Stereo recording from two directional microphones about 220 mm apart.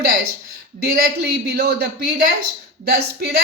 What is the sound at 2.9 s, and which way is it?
Speech, 45° right (ahead or behind).